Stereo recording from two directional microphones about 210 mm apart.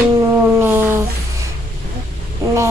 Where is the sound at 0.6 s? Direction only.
10° right (ahead or behind).